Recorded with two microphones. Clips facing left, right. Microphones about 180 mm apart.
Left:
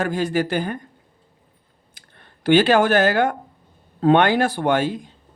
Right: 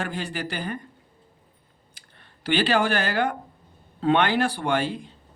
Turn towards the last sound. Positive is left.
turn(degrees=45)  # may be behind; listen again after turning